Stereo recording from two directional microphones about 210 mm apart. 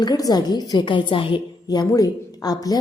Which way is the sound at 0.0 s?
15° left (ahead or behind).